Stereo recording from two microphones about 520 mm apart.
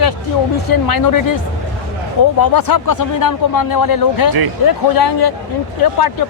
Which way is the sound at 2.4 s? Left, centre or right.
Left.